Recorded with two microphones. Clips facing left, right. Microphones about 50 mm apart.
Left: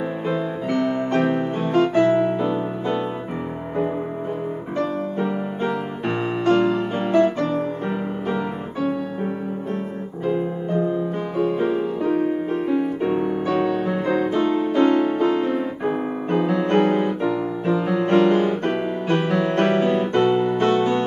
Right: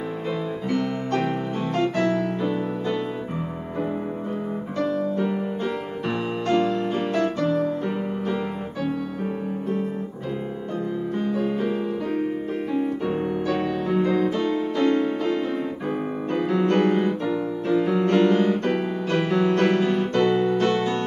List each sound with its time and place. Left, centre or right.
1.1 s music: left
4.7 s music: left
7.2 s music: left
10.2 s music: left
13.7 s music: centre